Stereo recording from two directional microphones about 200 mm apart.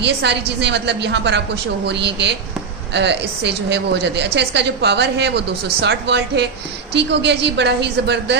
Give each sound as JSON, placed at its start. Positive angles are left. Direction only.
{"t": 0.0, "sound": "a woman's voice", "side_deg": -60}